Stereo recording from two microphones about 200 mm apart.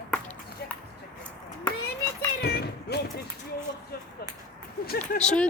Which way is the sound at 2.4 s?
55° left (ahead or behind).